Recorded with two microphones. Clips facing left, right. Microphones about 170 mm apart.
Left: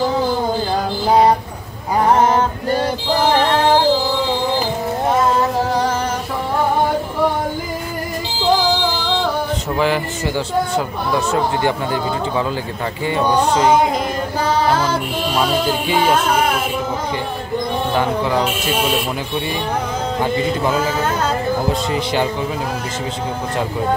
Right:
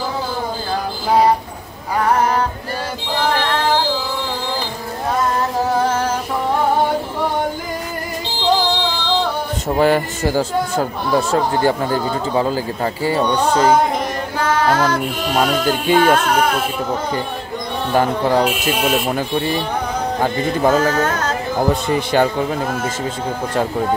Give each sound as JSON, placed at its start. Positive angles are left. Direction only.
{"t": 2.0, "sound": "a sound", "side_deg": 25}
{"t": 9.8, "sound": "speech", "side_deg": -45}
{"t": 15.9, "sound": "music", "side_deg": -55}
{"t": 17.9, "sound": "speech", "side_deg": -45}
{"t": 20.2, "sound": "speech", "side_deg": -45}